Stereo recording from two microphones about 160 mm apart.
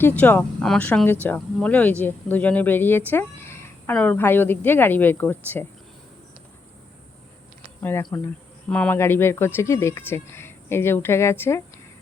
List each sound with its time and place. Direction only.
0.0 s speech: 10° left (ahead or behind)
7.8 s speech: 15° left (ahead or behind)